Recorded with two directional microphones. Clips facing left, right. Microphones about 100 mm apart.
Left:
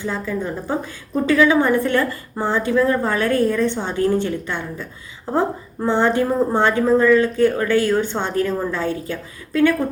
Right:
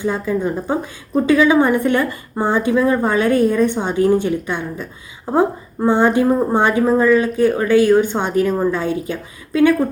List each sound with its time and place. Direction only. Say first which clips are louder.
0.0 s a woman's voice: right 5 dB; 15° right (ahead or behind)